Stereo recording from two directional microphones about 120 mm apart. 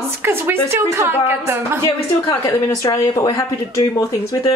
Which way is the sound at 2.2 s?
40° left (ahead or behind).